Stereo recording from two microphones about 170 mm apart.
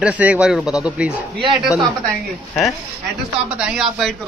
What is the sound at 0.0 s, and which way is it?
A man's voice, 5° right (ahead or behind).